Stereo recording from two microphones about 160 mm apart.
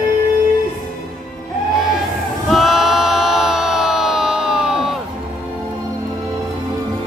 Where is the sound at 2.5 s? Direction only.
Centre (ahead or behind).